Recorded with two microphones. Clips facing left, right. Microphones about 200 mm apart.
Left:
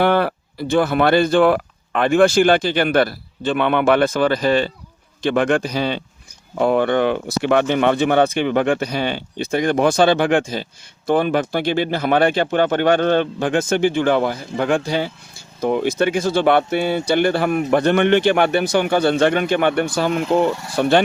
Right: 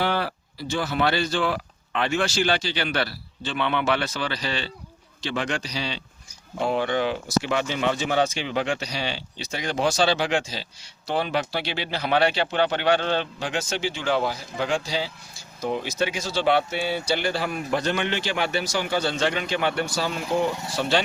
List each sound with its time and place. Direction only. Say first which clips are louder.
0.0 s speech: left 9 dB; 55° left (ahead or behind)